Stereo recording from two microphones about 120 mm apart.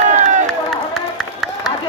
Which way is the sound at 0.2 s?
90° right.